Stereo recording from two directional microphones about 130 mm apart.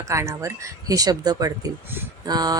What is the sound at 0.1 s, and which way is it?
Speech, 25° right (ahead or behind).